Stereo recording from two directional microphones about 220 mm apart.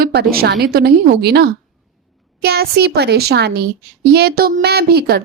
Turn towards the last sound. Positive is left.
turn(degrees=-45)  # may be behind; listen again after turning